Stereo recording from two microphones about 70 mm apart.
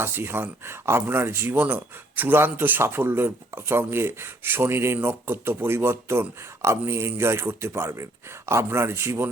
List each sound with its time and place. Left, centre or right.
0.0 s speech: right